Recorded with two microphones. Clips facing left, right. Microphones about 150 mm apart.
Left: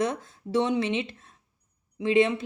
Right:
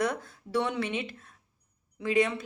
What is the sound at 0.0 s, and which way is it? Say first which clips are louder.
A woman's voice: left 2 dB; 20° left (ahead or behind).